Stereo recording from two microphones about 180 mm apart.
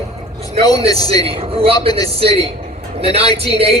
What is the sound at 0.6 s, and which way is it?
Speech, 20° left (ahead or behind).